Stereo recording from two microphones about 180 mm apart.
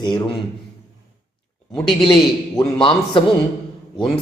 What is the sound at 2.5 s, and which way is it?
Speech, 30° left (ahead or behind).